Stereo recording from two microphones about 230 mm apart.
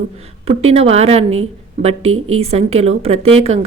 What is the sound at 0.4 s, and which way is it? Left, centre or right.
Speech, right.